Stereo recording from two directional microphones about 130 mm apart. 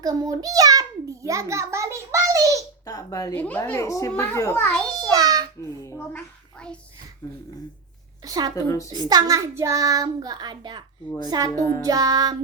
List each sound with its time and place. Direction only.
0.0 s a sound: 30° right (ahead or behind)
2.8 s a woman's voice: 25° left (ahead or behind)
3.3 s a child's voice: 10° left (ahead or behind)
3.6 s a woman's voice: 25° left (ahead or behind)
4.9 s a sound: 30° right (ahead or behind)
5.8 s a woman's voice: 20° left (ahead or behind)
8.2 s child singing: 30° right (ahead or behind)
8.5 s a woman's voice: 25° left (ahead or behind)
8.9 s child singing: 30° right (ahead or behind)